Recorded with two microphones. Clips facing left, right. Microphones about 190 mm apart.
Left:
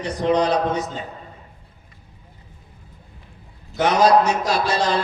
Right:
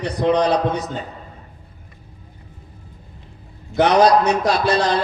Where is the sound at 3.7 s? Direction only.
65° right (ahead or behind).